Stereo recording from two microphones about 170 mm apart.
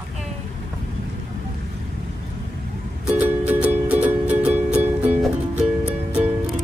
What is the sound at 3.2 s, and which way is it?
Music, 10° right (ahead or behind).